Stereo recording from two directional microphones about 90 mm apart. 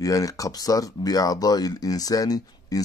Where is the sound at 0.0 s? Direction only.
40° left (ahead or behind).